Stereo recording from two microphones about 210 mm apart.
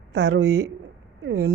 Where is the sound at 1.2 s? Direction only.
90° right.